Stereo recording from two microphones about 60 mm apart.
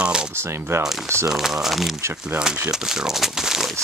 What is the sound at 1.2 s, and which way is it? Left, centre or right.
Speech, centre.